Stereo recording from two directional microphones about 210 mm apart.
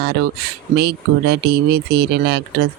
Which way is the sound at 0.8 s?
50° right (ahead or behind).